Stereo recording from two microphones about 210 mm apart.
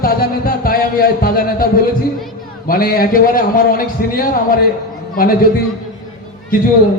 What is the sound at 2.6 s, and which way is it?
A man's voice, 45° left (ahead or behind).